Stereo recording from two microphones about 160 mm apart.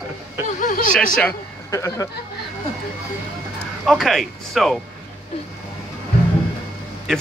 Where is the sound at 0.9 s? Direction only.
5° left (ahead or behind).